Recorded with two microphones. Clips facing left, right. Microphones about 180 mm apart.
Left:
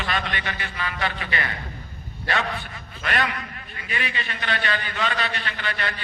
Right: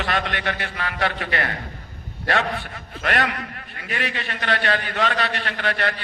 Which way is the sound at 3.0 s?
60° right (ahead or behind).